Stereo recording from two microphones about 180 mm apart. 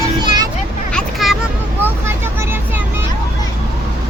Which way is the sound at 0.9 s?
Centre (ahead or behind).